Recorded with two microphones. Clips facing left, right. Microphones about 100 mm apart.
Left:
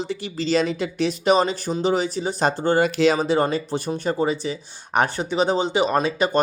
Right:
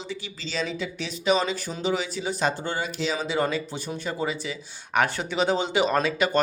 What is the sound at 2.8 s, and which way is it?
Speech, 85° left.